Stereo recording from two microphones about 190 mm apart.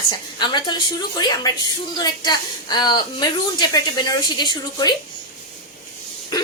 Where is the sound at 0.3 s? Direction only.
25° left (ahead or behind).